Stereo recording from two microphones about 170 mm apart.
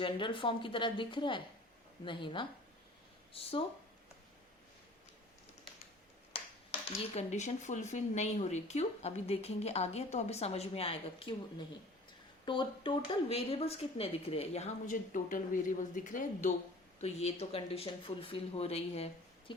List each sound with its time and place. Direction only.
0.0 s a woman's voice: 30° left (ahead or behind)
6.3 s speech: 35° left (ahead or behind)
12.5 s speech: 30° left (ahead or behind); by 16.5 s 50° left (ahead or behind)
17.0 s speech: 40° left (ahead or behind)